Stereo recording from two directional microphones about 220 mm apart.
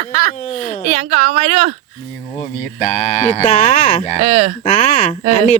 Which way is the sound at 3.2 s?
30° left (ahead or behind).